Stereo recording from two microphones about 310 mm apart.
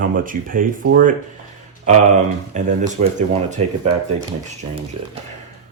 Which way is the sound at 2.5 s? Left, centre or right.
Right.